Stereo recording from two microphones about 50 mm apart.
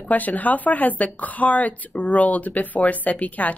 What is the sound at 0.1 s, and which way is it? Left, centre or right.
Speech, left.